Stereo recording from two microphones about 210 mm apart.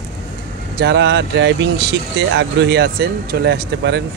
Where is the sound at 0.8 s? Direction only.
55° right (ahead or behind).